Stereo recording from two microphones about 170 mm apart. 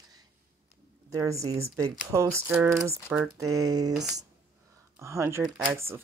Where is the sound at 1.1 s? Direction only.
20° right (ahead or behind).